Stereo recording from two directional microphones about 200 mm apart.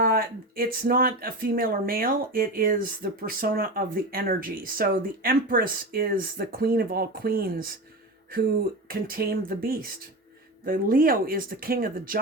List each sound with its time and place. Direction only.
0.0 s speech: 45° right (ahead or behind)
8.9 s speech: 50° right (ahead or behind)